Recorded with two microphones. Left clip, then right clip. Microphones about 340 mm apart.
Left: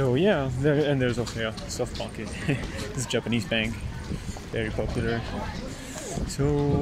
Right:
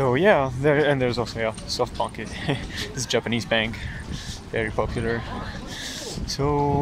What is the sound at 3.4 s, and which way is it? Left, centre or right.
Speech, right.